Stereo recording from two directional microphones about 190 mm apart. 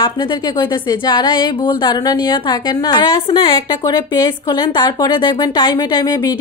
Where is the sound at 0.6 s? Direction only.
20° left (ahead or behind).